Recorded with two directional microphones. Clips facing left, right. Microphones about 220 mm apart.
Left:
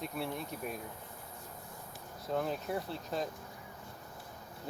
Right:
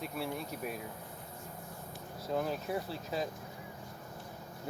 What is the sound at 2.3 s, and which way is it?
Speech, centre (ahead or behind).